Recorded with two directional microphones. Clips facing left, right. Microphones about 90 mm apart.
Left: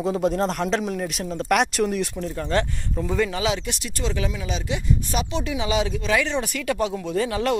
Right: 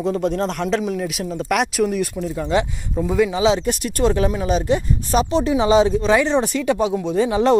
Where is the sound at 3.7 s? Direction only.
50° right (ahead or behind); by 7.6 s 20° right (ahead or behind).